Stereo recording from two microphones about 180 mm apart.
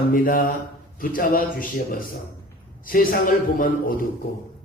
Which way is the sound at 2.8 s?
50° left (ahead or behind).